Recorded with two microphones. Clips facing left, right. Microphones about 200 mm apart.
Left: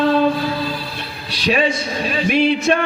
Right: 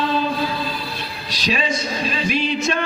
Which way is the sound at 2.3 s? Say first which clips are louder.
Left 8 dB; 60° left (ahead or behind).